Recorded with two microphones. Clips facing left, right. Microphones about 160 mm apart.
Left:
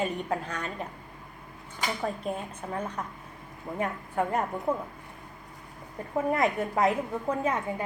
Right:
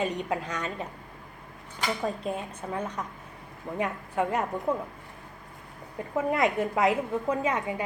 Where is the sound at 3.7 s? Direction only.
5° left (ahead or behind).